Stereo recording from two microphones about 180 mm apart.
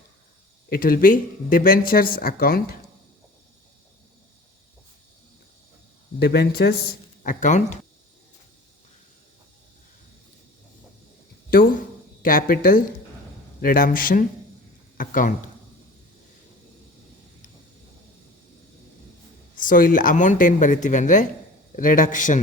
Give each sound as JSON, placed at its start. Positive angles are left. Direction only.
{"t": 0.7, "sound": "speech", "side_deg": 55}
{"t": 6.1, "sound": "speech", "side_deg": 65}
{"t": 7.3, "sound": "speech", "side_deg": 45}
{"t": 12.2, "sound": "speech", "side_deg": 50}
{"t": 19.6, "sound": "speech", "side_deg": 50}